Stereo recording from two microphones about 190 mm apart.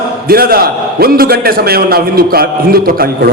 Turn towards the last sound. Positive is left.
turn(degrees=-50)  # may be behind; listen again after turning